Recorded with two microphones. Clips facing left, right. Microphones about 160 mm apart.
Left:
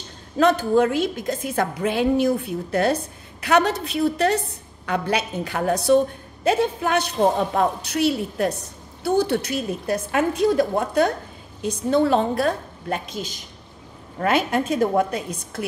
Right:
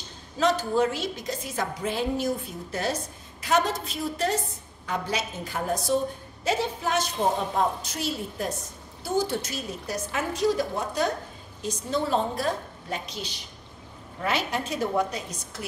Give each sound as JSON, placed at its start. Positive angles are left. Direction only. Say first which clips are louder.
{"t": 0.4, "sound": "a man's voice", "louder": "left 6 dB", "side_deg": 60}
{"t": 6.4, "sound": "a man's voice", "louder": "left 6 dB", "side_deg": 55}